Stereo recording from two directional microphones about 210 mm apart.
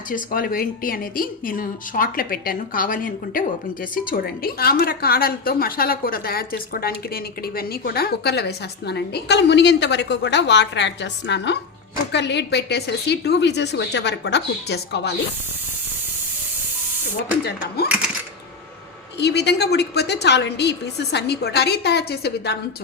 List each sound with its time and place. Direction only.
0.1 s a woman's voice: 40° left (ahead or behind)
19.2 s a woman's voice: 55° left (ahead or behind)